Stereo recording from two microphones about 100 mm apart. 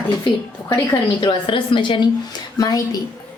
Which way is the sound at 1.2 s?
50° left (ahead or behind).